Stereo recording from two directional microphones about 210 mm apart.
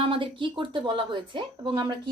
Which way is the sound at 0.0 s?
25° right (ahead or behind).